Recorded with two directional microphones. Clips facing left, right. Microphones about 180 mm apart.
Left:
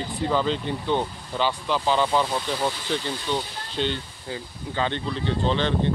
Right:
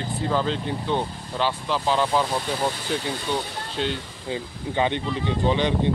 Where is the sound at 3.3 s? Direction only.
10° right (ahead or behind).